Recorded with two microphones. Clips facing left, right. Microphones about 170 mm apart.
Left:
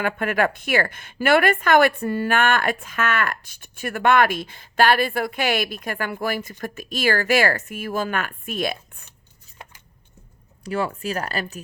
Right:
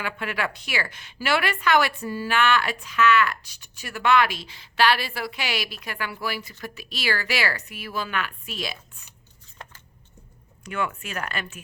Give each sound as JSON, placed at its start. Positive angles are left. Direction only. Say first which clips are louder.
{"t": 0.0, "sound": "a woman's voice", "louder": "left 7 dB", "side_deg": 50}
{"t": 10.6, "sound": "speech", "louder": "left 4 dB", "side_deg": 35}